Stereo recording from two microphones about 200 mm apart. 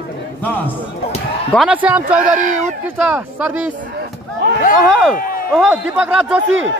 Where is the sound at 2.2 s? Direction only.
40° right (ahead or behind).